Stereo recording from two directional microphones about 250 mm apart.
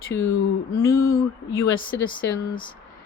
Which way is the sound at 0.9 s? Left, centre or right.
Left.